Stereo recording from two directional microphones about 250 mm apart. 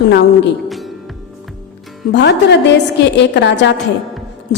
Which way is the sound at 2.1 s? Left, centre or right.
Left.